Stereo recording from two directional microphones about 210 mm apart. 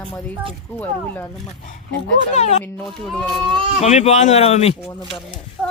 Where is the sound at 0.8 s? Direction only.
10° left (ahead or behind).